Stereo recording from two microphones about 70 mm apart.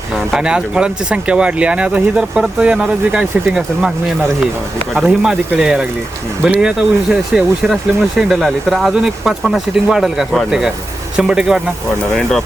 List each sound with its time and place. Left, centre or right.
0.3 s speech: centre
4.9 s speech: centre